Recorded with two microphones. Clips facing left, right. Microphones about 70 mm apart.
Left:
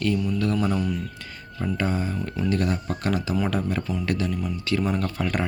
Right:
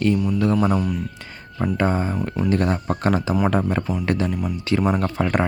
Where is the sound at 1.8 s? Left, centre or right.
Right.